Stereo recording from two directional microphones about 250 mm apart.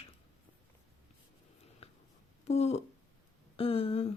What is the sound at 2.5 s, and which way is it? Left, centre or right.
Speech, left.